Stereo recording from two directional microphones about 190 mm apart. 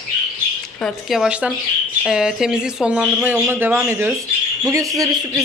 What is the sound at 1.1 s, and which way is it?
Speech, 5° right (ahead or behind).